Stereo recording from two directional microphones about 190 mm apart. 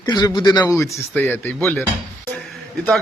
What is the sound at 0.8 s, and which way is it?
Speech, 10° left (ahead or behind).